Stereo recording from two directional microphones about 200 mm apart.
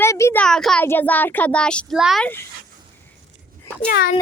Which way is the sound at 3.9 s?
45° left (ahead or behind).